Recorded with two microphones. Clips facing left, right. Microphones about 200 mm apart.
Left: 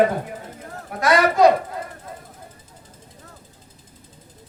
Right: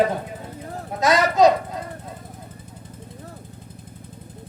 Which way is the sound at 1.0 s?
20° right (ahead or behind).